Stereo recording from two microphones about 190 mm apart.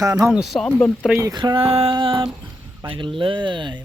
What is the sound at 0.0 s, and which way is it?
Speech, 20° right (ahead or behind).